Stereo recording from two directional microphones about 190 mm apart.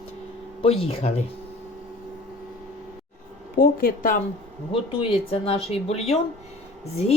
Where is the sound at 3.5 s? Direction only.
50° left (ahead or behind).